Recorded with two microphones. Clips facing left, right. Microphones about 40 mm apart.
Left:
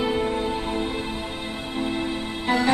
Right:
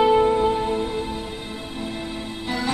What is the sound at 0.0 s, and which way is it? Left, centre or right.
Music, centre.